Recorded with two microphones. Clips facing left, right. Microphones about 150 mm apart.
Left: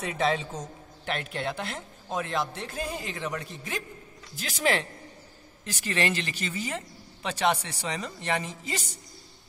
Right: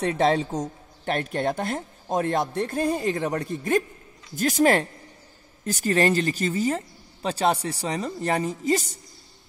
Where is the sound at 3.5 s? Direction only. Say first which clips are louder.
Right 13 dB; 55° right (ahead or behind).